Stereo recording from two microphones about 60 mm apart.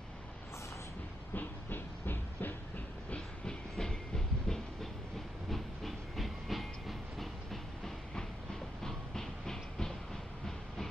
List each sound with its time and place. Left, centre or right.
1.3 s train: left
3.4 s train: centre